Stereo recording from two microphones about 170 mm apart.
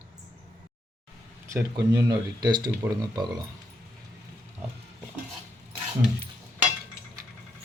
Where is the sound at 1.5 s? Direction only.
20° right (ahead or behind).